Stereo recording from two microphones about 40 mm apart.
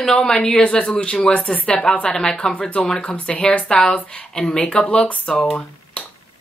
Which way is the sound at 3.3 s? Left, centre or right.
Left.